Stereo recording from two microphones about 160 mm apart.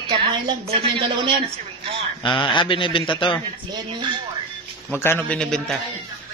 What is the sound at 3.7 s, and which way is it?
Speech, 30° right (ahead or behind).